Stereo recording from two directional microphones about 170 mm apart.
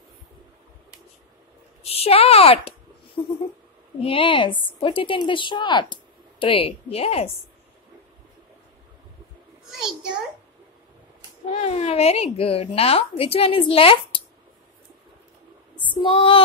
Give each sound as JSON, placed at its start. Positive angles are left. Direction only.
{"t": 1.8, "sound": "a sound", "side_deg": 35}
{"t": 4.0, "sound": "a woman's voice", "side_deg": 30}
{"t": 9.7, "sound": "a child's voice", "side_deg": 0}
{"t": 11.4, "sound": "speech", "side_deg": 40}
{"t": 16.0, "sound": "speech", "side_deg": 30}